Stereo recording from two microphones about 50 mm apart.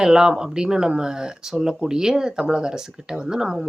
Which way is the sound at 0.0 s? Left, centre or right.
Centre.